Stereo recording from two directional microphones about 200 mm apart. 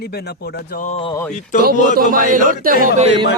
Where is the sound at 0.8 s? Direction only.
30° left (ahead or behind).